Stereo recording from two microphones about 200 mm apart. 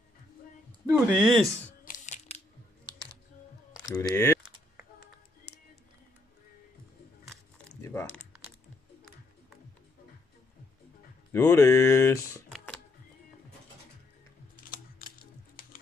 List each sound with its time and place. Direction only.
0.8 s speech: 5° right (ahead or behind)
1.9 s a sound: 35° left (ahead or behind)
4.0 s speech: 10° left (ahead or behind)
7.5 s a sound: 10° left (ahead or behind)
11.3 s speech: 15° left (ahead or behind)
14.7 s music: 45° left (ahead or behind)